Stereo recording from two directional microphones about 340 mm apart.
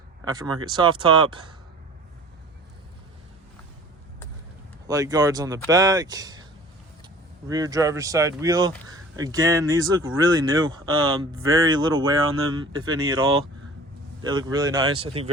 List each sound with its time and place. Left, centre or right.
0.3 s speech: centre
4.9 s speech: centre
7.4 s speech: centre
11.9 s speech: right
14.2 s speech: centre